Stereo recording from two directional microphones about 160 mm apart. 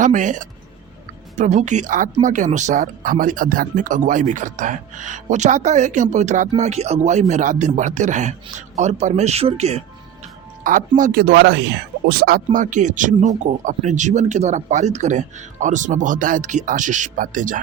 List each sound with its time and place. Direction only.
0.0 s speech: 50° right (ahead or behind)
10.6 s a man's voice: 55° right (ahead or behind); by 11.6 s 90° right
12.0 s speech: 70° right (ahead or behind); by 17.6 s 55° right (ahead or behind)